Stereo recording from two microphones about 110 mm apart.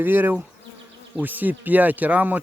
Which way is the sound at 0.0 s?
20° right (ahead or behind).